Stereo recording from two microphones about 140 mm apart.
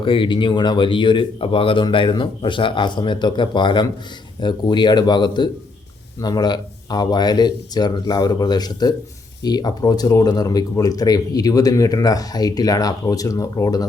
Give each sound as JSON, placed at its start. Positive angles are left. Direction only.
{"t": 0.0, "sound": "speech", "side_deg": 35}